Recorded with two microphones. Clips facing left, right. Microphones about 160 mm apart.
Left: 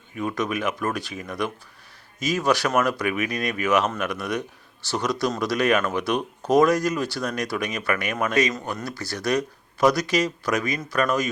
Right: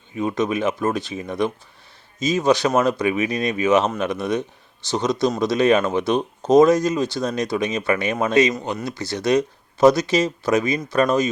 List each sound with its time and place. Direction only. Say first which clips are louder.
0.2 s speech: right 5 dB; 25° right (ahead or behind)